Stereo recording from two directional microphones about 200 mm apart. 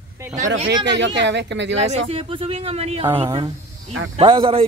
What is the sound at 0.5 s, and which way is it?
Speech, 60° right (ahead or behind).